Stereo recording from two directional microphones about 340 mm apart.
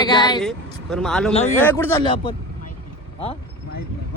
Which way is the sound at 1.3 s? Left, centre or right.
Centre.